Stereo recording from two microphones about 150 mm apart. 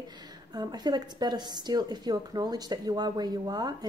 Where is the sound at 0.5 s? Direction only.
25° right (ahead or behind).